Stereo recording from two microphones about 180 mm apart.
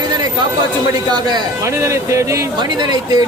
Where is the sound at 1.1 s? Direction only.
25° right (ahead or behind).